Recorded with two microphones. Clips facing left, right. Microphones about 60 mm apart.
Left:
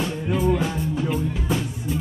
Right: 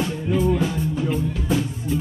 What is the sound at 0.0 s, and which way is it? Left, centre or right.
Music, centre.